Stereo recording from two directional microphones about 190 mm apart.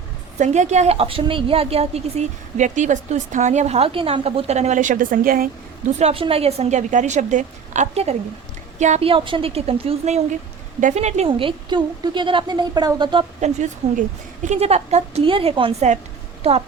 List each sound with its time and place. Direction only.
0.3 s a woman's voice: 40° right (ahead or behind)
6.0 s a woman's voice: 30° right (ahead or behind)
13.4 s a woman's voice: 40° right (ahead or behind)